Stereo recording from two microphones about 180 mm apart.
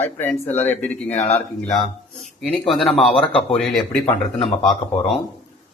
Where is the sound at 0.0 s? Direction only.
10° left (ahead or behind).